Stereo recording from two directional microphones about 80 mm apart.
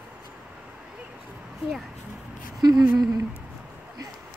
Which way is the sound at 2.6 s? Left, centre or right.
Right.